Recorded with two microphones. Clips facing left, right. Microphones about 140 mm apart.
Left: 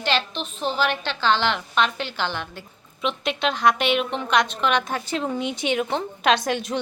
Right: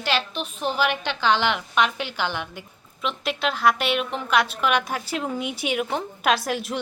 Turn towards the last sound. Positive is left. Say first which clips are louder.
# left 2 dB
turn(degrees=-5)  # may be behind; listen again after turning